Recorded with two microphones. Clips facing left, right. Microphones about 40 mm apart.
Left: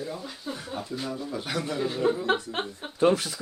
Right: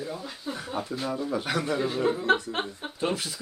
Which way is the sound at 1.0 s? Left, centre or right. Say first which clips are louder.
Right 4 dB; right.